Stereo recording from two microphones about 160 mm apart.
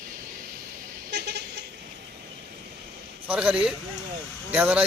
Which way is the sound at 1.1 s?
90° right.